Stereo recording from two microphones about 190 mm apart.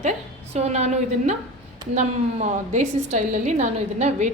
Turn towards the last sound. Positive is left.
turn(degrees=-40)  # may be behind; listen again after turning